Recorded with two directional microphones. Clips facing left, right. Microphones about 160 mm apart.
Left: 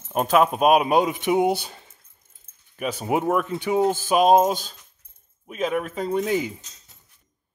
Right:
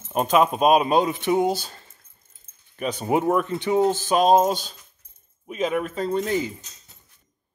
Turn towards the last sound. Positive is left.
turn(degrees=10)  # may be behind; listen again after turning